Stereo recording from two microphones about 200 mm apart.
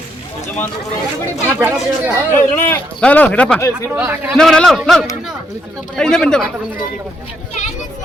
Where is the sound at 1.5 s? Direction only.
10° right (ahead or behind).